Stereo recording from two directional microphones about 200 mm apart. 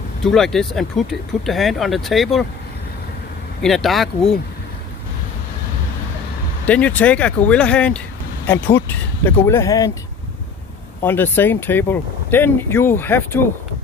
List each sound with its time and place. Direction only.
0.2 s speech: centre (ahead or behind)
3.6 s speech: centre (ahead or behind)
6.6 s speech: 5° left (ahead or behind)
11.0 s speech: 10° left (ahead or behind)